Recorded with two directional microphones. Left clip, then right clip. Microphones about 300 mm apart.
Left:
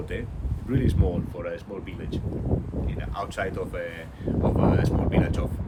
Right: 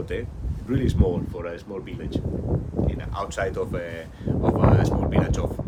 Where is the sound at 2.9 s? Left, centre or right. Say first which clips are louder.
Right 2 dB; centre.